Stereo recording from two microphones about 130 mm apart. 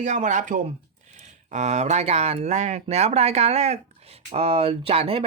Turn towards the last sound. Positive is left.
turn(degrees=-50)  # may be behind; listen again after turning